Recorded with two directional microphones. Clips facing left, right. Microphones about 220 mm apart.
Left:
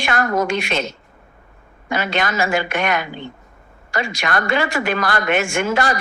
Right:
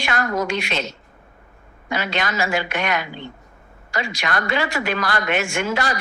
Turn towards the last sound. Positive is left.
turn(degrees=50)  # may be behind; listen again after turning